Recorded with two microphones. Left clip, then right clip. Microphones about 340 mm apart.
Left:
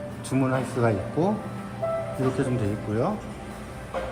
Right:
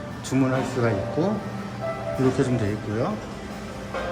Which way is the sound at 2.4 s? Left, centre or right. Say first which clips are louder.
Right 3 dB; centre.